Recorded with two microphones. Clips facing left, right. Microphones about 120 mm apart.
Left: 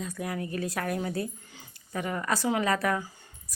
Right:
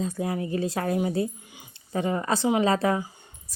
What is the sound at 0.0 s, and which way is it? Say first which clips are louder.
A woman's voice: right 5 dB; 25° right (ahead or behind).